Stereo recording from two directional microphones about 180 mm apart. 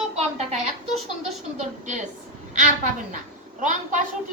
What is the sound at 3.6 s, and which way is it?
Speech, 45° right (ahead or behind).